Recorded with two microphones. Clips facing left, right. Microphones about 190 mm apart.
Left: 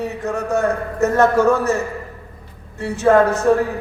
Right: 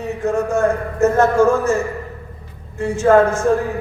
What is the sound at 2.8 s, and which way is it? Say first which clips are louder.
Speech: right 1 dB; 65° left (ahead or behind).